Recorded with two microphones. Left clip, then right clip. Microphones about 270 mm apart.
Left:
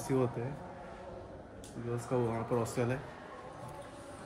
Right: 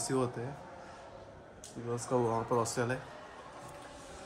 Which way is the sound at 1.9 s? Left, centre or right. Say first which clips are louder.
Right 3 dB; right.